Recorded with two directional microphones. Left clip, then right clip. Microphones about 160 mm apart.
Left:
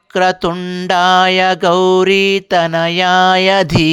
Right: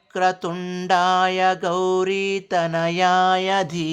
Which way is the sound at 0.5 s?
15° left (ahead or behind).